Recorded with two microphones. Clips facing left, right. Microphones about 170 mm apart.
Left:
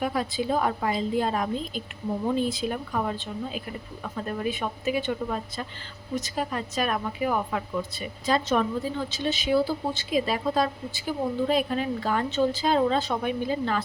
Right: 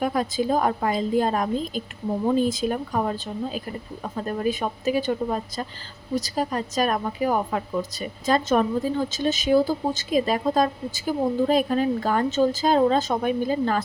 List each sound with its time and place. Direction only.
0.0 s a woman's voice: 45° right (ahead or behind)